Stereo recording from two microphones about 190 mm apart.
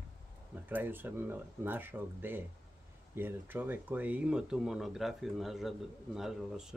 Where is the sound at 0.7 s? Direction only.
10° right (ahead or behind).